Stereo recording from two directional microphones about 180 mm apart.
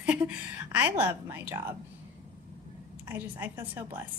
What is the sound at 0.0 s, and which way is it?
Music, 5° right (ahead or behind).